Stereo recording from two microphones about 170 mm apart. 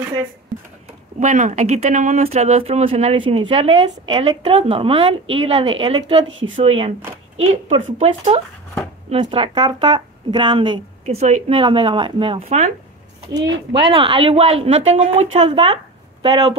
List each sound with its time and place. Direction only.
1.2 s speech: 45° right (ahead or behind); by 11.1 s 25° right (ahead or behind)
11.1 s speech: 40° right (ahead or behind)
11.5 s speech: 30° right (ahead or behind)
13.3 s speech: 30° right (ahead or behind)
15.7 s a sound: 30° right (ahead or behind)